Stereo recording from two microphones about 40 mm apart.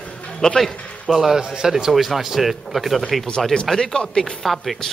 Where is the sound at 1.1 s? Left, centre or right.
Centre.